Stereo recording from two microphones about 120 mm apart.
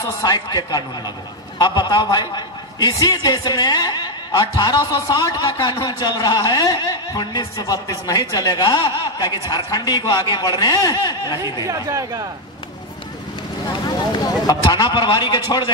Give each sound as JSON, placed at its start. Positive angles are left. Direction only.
{"t": 0.2, "sound": "a man's voice", "side_deg": 35}
{"t": 11.6, "sound": "speech", "side_deg": -30}
{"t": 14.4, "sound": "a man's voice", "side_deg": 35}